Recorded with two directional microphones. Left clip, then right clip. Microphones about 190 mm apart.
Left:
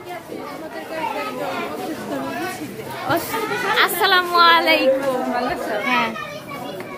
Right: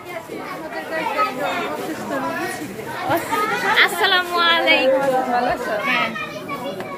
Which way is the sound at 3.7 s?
25° left (ahead or behind).